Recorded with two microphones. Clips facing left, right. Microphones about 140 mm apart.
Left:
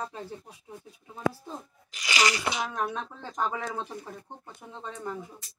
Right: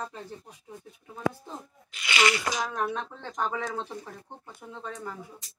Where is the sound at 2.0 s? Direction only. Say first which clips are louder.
Right 1 dB; 35° left (ahead or behind).